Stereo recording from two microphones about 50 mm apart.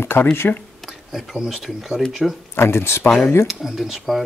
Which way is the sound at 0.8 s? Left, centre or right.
Centre.